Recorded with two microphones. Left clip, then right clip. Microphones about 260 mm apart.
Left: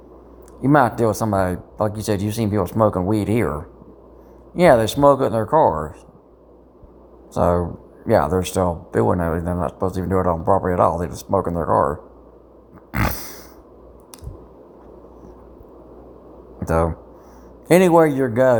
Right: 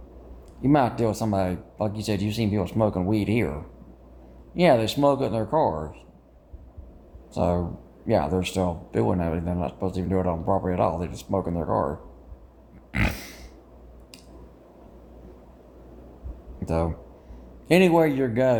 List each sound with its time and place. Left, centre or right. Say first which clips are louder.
0.6 s speech: left 6 dB; centre
4.5 s speech: left 6 dB; centre
7.3 s speech: left 7 dB; centre
12.9 s pig: left 4 dB; centre
16.6 s speech: left 7 dB; left